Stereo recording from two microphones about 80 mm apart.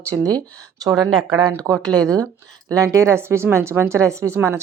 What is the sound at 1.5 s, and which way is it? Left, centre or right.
Speech, right.